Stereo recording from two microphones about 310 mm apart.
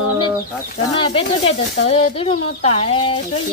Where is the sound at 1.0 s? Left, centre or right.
Centre.